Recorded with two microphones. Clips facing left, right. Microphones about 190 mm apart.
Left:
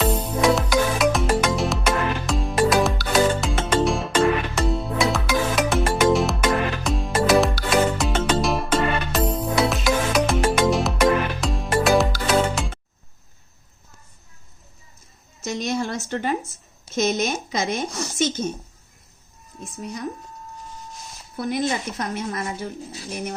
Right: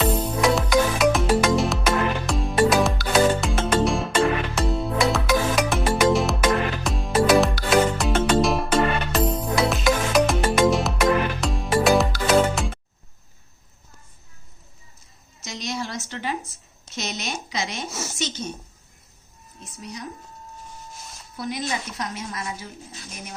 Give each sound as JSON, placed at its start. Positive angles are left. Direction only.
{"t": 0.0, "sound": "music", "side_deg": 0}
{"t": 15.4, "sound": "a sound", "side_deg": 50}
{"t": 16.9, "sound": "speech", "side_deg": 50}
{"t": 17.8, "sound": "a woman's voice", "side_deg": -5}
{"t": 18.2, "sound": "speech", "side_deg": 50}
{"t": 19.5, "sound": "speech", "side_deg": 50}
{"t": 21.3, "sound": "speech", "side_deg": 55}